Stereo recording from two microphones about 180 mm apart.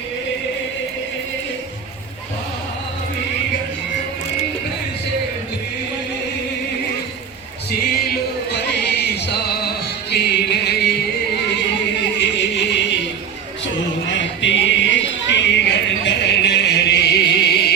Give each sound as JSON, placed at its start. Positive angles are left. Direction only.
{"t": 8.0, "sound": "music", "side_deg": 65}
{"t": 12.4, "sound": "music", "side_deg": 75}
{"t": 14.1, "sound": "a sound", "side_deg": 90}